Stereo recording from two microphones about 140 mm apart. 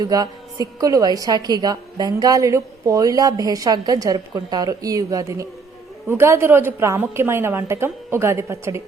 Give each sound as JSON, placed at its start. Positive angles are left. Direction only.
{"t": 0.0, "sound": "a woman's voice", "side_deg": -30}